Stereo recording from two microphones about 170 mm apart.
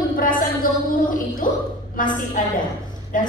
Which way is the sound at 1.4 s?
50° left (ahead or behind).